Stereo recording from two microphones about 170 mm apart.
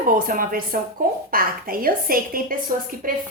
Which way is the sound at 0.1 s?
55° right (ahead or behind).